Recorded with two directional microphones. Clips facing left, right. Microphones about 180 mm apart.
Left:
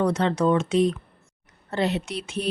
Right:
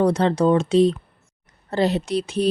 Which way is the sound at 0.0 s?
35° right (ahead or behind).